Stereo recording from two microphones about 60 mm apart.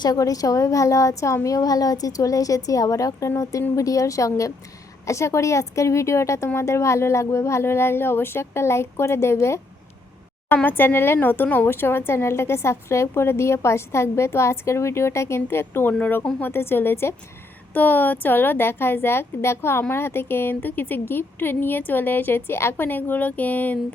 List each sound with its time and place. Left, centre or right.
0.1 s a woman's voice: left
1.5 s a woman's voice: left
10.5 s a woman's voice: left
17.7 s a woman's voice: left
22.9 s speech: left